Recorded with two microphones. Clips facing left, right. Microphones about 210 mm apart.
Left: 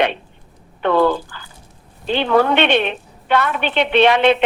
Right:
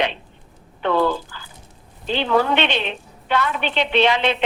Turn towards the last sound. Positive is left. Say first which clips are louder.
# left 5 dB
turn(degrees=60)  # may be behind; listen again after turning